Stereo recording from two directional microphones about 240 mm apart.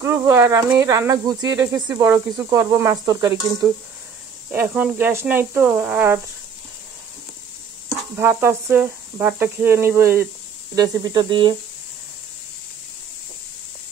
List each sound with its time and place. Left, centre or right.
0.0 s speech: centre
4.5 s speech: centre
8.2 s speech: centre